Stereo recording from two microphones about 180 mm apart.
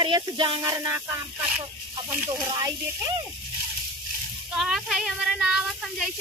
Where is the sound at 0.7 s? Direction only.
15° right (ahead or behind).